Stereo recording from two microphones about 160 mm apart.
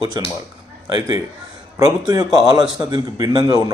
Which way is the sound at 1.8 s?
25° right (ahead or behind).